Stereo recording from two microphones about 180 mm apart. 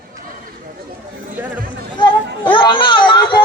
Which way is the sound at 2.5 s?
25° left (ahead or behind).